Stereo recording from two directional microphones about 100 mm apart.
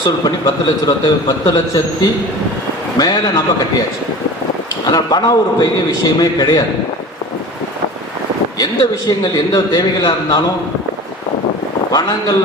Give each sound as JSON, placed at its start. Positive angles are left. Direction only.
{"t": 0.0, "sound": "a man's voice", "side_deg": 40}
{"t": 4.9, "sound": "a man's voice", "side_deg": 40}
{"t": 9.0, "sound": "a man's voice", "side_deg": 40}
{"t": 11.9, "sound": "speech", "side_deg": 40}